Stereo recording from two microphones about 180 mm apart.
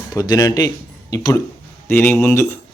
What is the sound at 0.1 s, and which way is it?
Speech, 20° left (ahead or behind).